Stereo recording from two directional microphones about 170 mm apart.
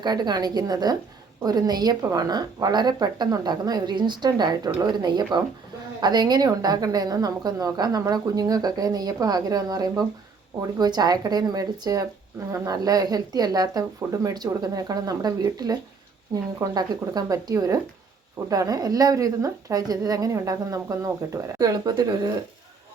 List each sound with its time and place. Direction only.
0.0 s a woman's voice: 25° right (ahead or behind)